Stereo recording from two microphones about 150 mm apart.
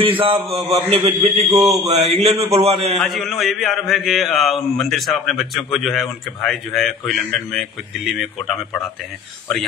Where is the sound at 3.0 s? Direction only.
Centre (ahead or behind).